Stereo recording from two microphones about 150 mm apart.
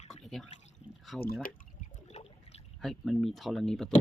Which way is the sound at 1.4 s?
50° left (ahead or behind).